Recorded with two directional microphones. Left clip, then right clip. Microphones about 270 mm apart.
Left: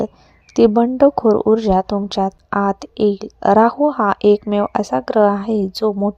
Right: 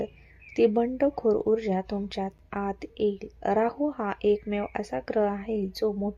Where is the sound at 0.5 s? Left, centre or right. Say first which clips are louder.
Left 10 dB; left.